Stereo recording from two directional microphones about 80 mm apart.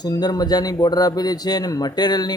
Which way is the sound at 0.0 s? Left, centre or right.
Left.